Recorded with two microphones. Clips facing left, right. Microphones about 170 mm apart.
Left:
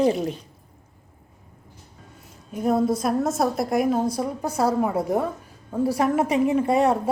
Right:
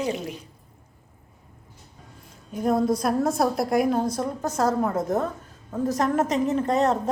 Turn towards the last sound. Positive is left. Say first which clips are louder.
# left 2 dB
turn(degrees=10)  # may be behind; listen again after turning